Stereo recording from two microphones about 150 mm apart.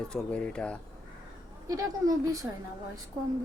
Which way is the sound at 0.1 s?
5° left (ahead or behind).